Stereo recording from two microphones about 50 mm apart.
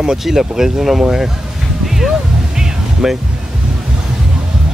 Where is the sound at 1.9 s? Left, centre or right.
Centre.